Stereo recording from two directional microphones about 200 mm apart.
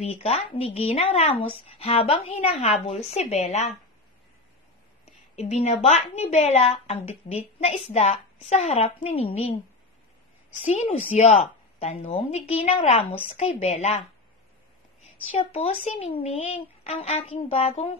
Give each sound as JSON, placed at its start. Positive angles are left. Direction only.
{"t": 0.0, "sound": "a woman's voice", "side_deg": 30}
{"t": 5.3, "sound": "a woman's voice", "side_deg": 35}
{"t": 10.8, "sound": "a woman's voice", "side_deg": 30}